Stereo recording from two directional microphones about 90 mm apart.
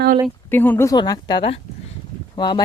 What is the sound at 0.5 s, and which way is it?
Speech, 20° left (ahead or behind).